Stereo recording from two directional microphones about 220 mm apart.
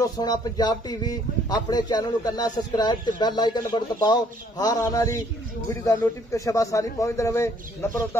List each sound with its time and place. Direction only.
0.0 s speech: 15° left (ahead or behind)